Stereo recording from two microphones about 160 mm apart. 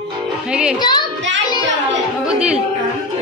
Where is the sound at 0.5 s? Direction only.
5° right (ahead or behind).